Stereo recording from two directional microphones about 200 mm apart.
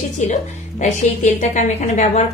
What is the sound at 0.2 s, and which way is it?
A woman's voice, 40° left (ahead or behind).